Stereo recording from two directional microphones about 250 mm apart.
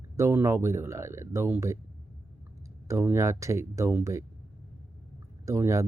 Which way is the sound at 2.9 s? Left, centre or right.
Centre.